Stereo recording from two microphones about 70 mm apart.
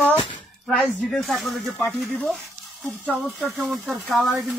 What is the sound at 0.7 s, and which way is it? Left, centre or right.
Speech, centre.